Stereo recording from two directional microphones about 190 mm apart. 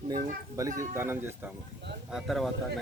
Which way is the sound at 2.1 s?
Centre (ahead or behind).